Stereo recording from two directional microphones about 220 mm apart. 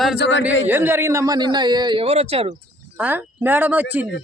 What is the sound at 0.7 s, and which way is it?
A man's voice, 10° right (ahead or behind).